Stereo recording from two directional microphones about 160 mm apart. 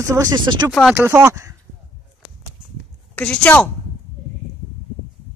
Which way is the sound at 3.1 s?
10° left (ahead or behind).